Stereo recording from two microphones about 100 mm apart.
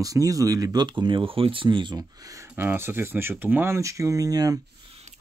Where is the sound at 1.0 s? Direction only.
50° right (ahead or behind).